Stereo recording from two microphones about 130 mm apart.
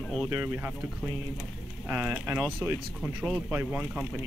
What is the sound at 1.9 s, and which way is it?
Speech, 15° right (ahead or behind).